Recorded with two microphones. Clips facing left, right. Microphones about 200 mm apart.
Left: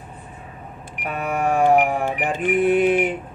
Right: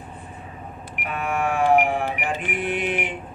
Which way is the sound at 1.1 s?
40° left (ahead or behind).